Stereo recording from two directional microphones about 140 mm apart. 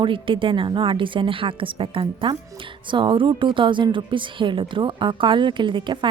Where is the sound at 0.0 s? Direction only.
35° right (ahead or behind).